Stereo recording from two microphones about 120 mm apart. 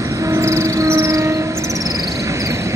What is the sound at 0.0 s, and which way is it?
Train, 25° right (ahead or behind).